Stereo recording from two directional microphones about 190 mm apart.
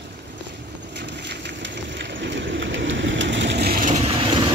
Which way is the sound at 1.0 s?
65° right (ahead or behind).